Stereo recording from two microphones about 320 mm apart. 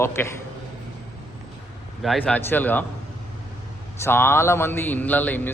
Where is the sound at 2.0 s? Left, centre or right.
Centre.